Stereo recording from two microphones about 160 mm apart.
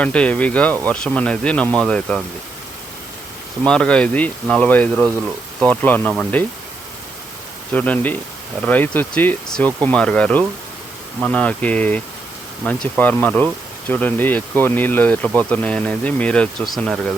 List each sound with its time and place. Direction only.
0.0 s speech: 10° left (ahead or behind)
3.7 s speech: 5° left (ahead or behind)
7.7 s speech: 10° left (ahead or behind)